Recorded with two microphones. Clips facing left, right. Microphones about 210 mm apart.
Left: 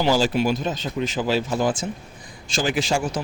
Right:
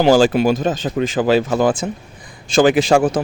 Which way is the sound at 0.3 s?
50° right (ahead or behind).